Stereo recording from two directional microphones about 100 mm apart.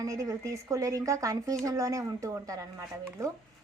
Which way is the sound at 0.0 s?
35° right (ahead or behind).